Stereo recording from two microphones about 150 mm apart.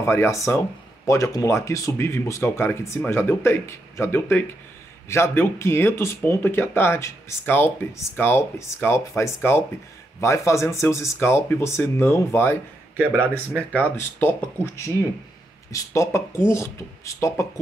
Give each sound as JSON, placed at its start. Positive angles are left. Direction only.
{"t": 0.0, "sound": "speech", "side_deg": 20}
{"t": 12.9, "sound": "a man's voice", "side_deg": -15}
{"t": 13.7, "sound": "speech", "side_deg": 10}